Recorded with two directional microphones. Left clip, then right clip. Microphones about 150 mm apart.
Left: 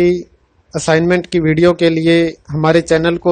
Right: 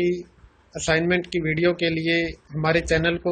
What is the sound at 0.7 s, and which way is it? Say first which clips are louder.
Speech: left 9 dB; 70° left (ahead or behind).